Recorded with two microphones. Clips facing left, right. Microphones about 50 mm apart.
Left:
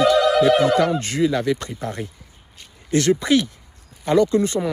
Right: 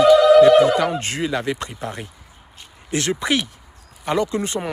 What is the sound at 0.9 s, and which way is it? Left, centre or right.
Speech, right.